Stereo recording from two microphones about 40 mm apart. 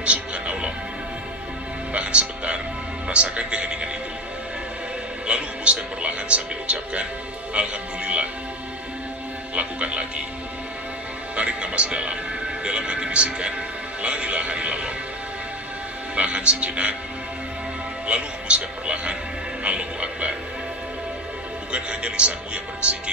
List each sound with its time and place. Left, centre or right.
0.0 s music: right
2.0 s music: right
3.1 s a man's voice: right
5.2 s a man's voice: right
9.6 s a man's voice: right
11.3 s a man's voice: right
16.2 s a man's voice: right
18.0 s a man's voice: right
19.6 s music: right
21.7 s a man's voice: right